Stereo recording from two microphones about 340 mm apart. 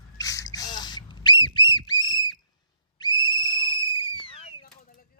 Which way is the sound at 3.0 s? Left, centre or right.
Centre.